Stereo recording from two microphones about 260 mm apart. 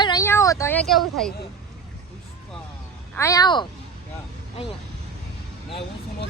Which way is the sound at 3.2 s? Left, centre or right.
Centre.